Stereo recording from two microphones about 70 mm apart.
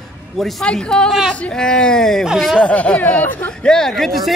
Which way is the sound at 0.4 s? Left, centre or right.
Centre.